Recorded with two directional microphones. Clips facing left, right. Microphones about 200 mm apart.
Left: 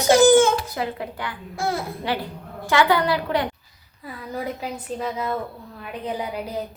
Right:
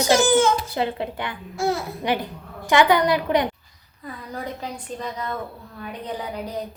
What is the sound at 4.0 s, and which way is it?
A woman's voice, 5° left (ahead or behind).